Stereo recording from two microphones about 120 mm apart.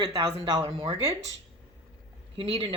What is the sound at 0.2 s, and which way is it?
Speech, 55° right (ahead or behind).